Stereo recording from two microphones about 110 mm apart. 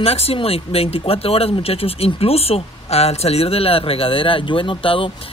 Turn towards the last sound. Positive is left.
turn(degrees=55)  # may be behind; listen again after turning